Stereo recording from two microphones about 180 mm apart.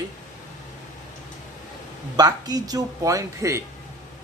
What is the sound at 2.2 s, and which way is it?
Speech, 20° right (ahead or behind).